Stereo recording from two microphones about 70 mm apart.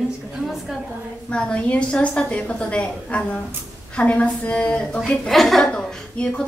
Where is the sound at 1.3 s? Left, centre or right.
Centre.